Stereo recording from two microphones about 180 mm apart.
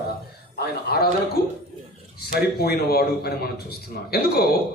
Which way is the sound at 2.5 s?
60° left (ahead or behind).